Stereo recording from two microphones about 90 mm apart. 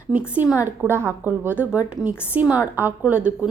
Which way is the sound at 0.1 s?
10° right (ahead or behind).